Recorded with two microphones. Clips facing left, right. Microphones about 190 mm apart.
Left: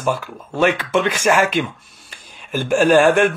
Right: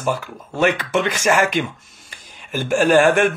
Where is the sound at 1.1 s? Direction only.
15° left (ahead or behind).